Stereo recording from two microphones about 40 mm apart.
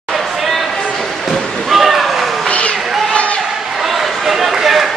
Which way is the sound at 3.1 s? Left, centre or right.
Left.